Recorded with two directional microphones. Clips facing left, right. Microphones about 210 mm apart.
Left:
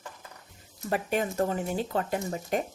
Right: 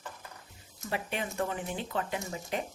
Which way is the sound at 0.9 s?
45° left (ahead or behind).